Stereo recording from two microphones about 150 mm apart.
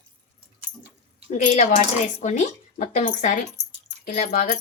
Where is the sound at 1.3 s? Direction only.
55° left (ahead or behind).